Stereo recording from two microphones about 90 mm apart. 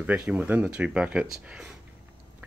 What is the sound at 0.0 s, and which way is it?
Speech, 15° right (ahead or behind).